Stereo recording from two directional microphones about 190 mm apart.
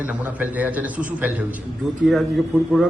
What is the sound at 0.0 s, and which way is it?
A man's voice, 10° right (ahead or behind).